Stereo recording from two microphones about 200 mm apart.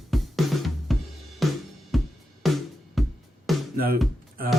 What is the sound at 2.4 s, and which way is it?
Music, centre (ahead or behind).